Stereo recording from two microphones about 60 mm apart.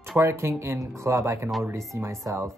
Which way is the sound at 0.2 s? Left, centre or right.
Right.